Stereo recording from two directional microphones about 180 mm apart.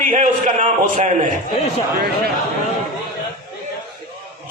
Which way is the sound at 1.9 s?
60° right (ahead or behind).